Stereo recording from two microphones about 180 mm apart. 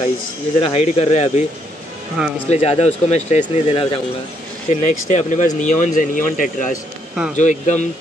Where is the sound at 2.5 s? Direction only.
35° left (ahead or behind).